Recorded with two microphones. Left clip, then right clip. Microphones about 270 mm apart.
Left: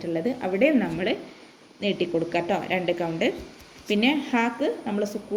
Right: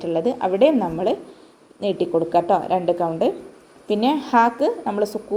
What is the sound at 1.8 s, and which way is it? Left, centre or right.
A woman's voice, centre.